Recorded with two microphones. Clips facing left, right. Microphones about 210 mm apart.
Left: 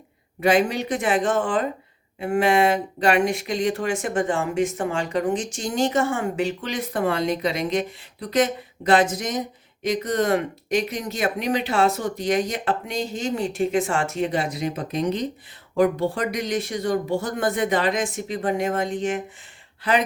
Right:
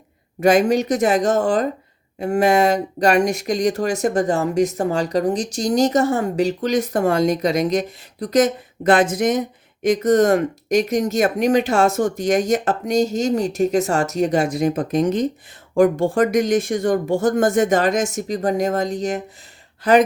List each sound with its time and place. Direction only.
0.3 s speech: 45° right (ahead or behind)